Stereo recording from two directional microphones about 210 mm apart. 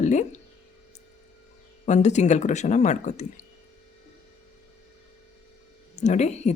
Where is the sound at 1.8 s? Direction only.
35° left (ahead or behind).